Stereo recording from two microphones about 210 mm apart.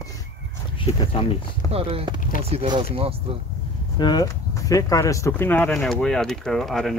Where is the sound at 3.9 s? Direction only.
20° left (ahead or behind).